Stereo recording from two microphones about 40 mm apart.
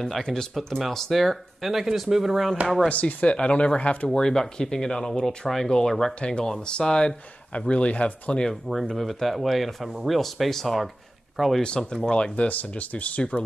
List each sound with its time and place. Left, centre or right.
0.0 s speech: centre
2.9 s speech: left
3.3 s speech: left
4.1 s speech: centre
6.1 s speech: left
7.5 s speech: left
8.9 s speech: centre
11.6 s speech: left
12.4 s speech: left